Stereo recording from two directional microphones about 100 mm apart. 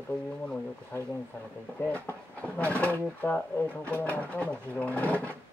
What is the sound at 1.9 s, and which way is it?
Speech, 15° left (ahead or behind).